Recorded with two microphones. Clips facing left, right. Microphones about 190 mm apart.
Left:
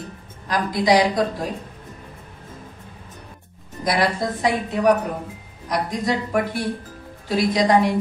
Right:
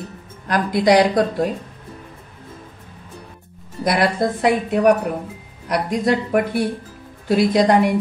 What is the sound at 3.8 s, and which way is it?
A woman's voice, 60° right (ahead or behind).